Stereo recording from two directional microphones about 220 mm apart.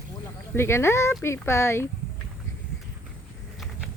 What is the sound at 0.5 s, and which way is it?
Speech, 10° left (ahead or behind).